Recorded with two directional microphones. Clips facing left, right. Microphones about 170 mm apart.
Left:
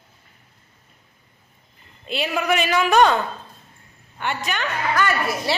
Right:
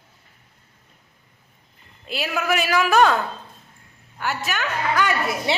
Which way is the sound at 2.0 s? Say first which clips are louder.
Left 2 dB; centre (ahead or behind).